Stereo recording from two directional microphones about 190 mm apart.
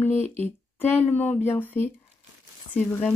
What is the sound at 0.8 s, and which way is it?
Speech, 10° left (ahead or behind).